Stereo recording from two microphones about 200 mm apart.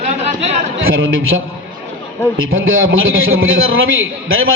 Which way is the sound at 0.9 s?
90° right.